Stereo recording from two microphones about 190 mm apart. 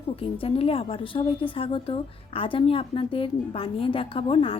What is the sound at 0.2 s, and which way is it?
A woman's voice, 30° left (ahead or behind).